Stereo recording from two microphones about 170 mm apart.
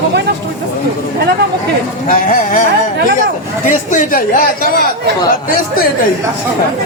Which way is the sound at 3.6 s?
50° left (ahead or behind).